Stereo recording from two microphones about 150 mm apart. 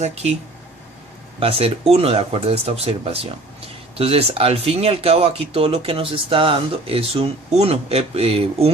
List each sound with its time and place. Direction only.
0.0 s speech: 45° right (ahead or behind)
1.4 s speech: 40° right (ahead or behind)